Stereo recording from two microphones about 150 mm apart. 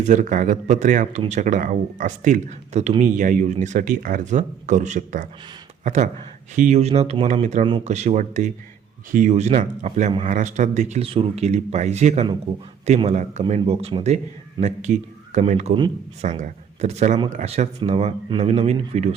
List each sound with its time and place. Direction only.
0.0 s speech: 55° right (ahead or behind)